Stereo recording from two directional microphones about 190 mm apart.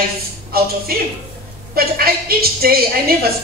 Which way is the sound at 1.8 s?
50° right (ahead or behind).